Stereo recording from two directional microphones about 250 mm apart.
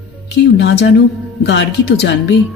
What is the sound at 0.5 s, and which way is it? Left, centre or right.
Speech, left.